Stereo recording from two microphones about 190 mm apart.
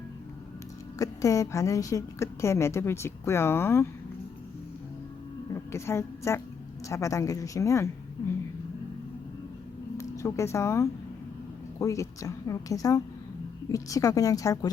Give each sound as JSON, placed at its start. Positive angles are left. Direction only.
{"t": 0.9, "sound": "a woman's voice", "side_deg": 15}
{"t": 5.7, "sound": "a woman's voice", "side_deg": 15}
{"t": 10.0, "sound": "a woman's voice", "side_deg": 15}